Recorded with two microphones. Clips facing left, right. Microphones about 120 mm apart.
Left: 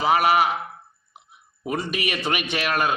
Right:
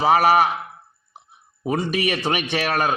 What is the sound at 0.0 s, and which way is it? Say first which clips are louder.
A man's voice: right 3 dB; 35° right (ahead or behind).